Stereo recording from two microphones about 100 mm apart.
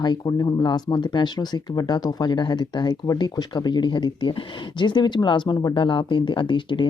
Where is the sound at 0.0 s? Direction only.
45° left (ahead or behind).